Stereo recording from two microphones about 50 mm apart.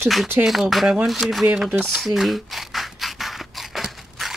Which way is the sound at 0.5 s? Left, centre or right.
Centre.